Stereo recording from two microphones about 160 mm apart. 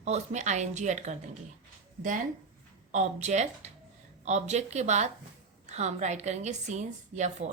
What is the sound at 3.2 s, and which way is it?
A woman's voice, 45° right (ahead or behind).